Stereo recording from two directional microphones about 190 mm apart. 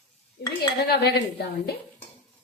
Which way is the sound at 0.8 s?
55° left (ahead or behind).